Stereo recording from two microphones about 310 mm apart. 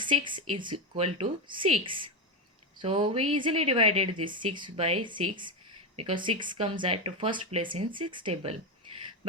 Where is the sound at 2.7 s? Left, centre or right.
Centre.